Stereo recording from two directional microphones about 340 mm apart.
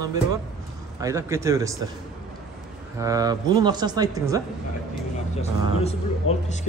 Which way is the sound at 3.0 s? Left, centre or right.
Centre.